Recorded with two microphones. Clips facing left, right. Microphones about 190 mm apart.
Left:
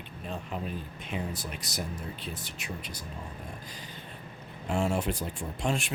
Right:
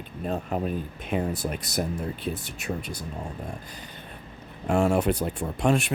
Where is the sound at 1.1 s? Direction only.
65° right (ahead or behind).